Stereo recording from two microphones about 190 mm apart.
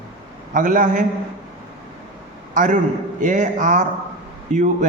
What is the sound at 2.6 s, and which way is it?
A man's voice, 45° right (ahead or behind).